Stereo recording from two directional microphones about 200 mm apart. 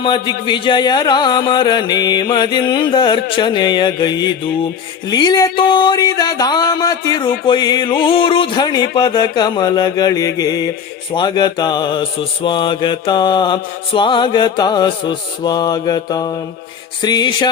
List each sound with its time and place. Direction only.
0.0 s mantra: 25° left (ahead or behind)